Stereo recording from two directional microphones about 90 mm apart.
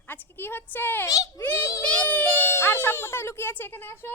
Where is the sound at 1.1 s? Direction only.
40° left (ahead or behind).